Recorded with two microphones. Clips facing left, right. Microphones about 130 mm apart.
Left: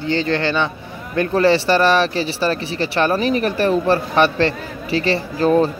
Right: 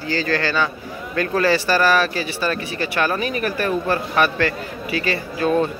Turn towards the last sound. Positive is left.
turn(degrees=35)  # may be behind; listen again after turning